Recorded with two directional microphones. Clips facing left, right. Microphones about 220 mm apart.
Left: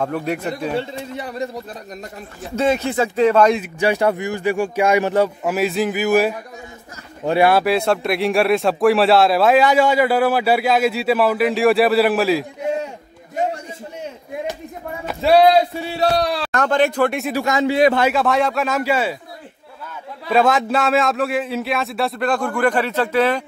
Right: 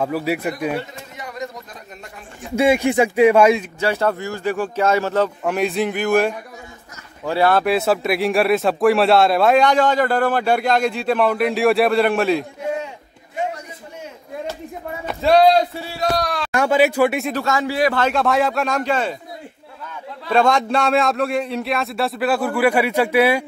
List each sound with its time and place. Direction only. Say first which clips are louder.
0.0 s speech: right 1 dB; 5° right (ahead or behind)
0.7 s a sound: left 5 dB; 30° left (ahead or behind)
2.5 s a man's voice: right 3 dB; 10° right (ahead or behind)
3.8 s speech: left 3 dB; 15° left (ahead or behind)
7.6 s speech: even; centre (ahead or behind)
15.0 s speech: left 1 dB; 5° left (ahead or behind)
16.0 s speech: left 3 dB; 30° left (ahead or behind)
16.5 s a man's voice: right 2 dB; 10° right (ahead or behind)
17.3 s a man's voice: left 3 dB; 15° left (ahead or behind)
18.0 s speech: left 1 dB; centre (ahead or behind)
20.2 s speech: even; 5° left (ahead or behind); by 23.4 s 10° right (ahead or behind)